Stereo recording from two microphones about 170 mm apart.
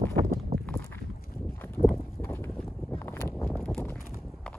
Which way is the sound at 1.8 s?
35° left (ahead or behind).